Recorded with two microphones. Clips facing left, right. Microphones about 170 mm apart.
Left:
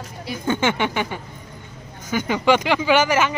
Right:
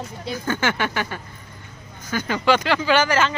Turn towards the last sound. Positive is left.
turn(degrees=15)  # may be behind; listen again after turning